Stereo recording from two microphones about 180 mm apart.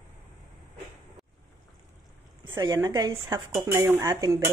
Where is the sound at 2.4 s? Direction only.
20° right (ahead or behind).